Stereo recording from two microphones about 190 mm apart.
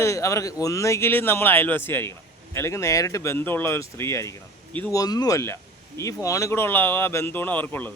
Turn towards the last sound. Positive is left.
turn(degrees=10)  # may be behind; listen again after turning